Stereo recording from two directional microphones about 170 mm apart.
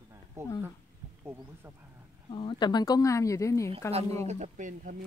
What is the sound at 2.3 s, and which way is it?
Speech, 30° left (ahead or behind).